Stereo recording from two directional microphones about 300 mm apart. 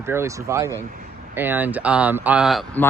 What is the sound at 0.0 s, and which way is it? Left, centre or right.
Speech, centre.